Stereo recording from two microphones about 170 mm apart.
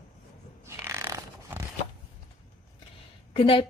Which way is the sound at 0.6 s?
15° right (ahead or behind).